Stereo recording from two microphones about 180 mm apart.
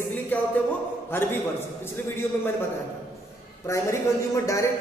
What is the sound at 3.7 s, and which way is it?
A man's voice, 15° left (ahead or behind).